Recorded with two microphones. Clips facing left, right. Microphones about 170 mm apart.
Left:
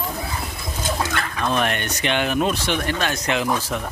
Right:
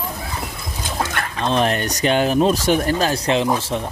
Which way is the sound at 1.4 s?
30° right (ahead or behind).